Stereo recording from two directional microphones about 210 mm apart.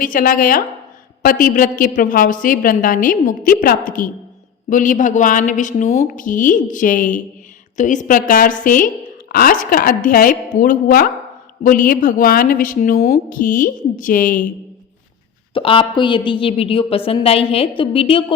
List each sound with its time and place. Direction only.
0.0 s a woman's voice: 40° left (ahead or behind)
15.5 s a woman's voice: 25° left (ahead or behind)